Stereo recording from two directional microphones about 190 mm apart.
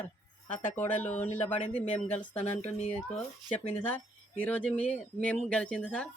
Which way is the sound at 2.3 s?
35° left (ahead or behind).